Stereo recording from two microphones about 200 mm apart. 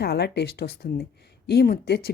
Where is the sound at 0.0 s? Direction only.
55° left (ahead or behind).